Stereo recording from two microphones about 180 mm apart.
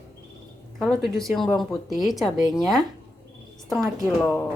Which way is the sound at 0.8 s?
Centre (ahead or behind).